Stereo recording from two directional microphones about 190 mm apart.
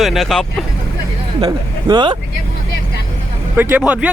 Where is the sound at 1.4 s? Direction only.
25° right (ahead or behind).